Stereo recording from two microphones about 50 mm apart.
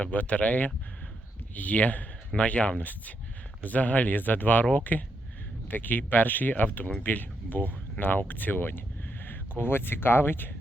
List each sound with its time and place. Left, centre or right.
0.0 s speech: left